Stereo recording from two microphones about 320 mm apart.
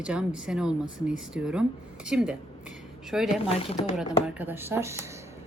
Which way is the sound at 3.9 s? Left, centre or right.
Centre.